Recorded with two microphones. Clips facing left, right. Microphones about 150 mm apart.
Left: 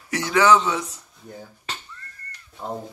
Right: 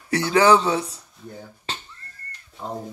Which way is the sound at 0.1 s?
30° right (ahead or behind).